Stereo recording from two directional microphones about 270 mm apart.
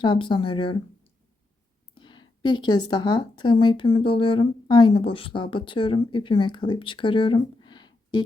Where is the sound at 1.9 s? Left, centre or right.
Centre.